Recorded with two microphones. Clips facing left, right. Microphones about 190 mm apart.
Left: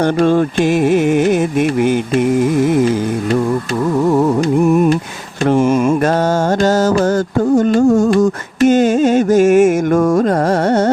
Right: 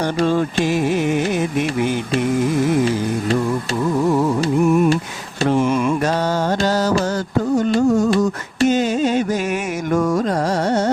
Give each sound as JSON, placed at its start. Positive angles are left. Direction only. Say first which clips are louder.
{"t": 0.0, "sound": "music", "louder": "left 5 dB", "side_deg": 55}
{"t": 5.5, "sound": "mantra", "louder": "left 5 dB", "side_deg": 45}